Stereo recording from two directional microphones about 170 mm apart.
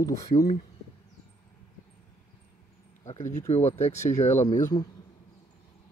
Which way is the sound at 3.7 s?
40° left (ahead or behind).